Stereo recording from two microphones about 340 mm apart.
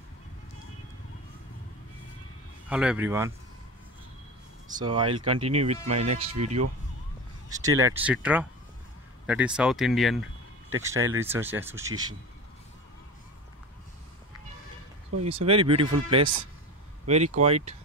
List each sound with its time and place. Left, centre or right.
2.7 s speech: centre
4.7 s speech: centre
15.2 s speech: centre